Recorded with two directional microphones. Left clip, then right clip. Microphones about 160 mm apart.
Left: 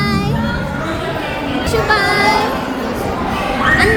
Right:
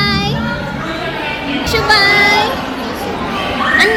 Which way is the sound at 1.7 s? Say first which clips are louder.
Right 3 dB; 15° right (ahead or behind).